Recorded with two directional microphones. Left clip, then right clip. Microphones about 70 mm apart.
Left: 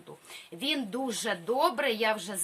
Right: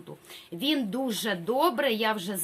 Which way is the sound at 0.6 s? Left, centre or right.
Right.